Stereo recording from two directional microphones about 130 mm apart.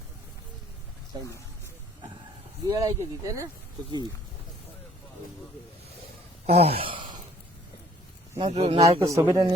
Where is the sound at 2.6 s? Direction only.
25° right (ahead or behind).